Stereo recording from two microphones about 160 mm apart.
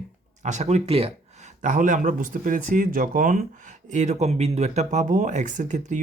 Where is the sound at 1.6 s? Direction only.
50° right (ahead or behind).